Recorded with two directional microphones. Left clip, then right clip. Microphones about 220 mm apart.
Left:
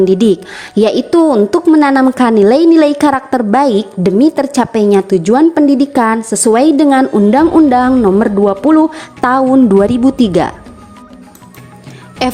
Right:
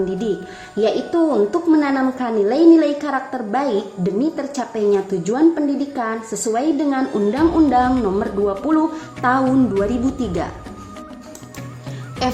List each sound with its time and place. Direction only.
0.8 s a woman's voice: 45° left (ahead or behind)
12.2 s speech: 35° left (ahead or behind)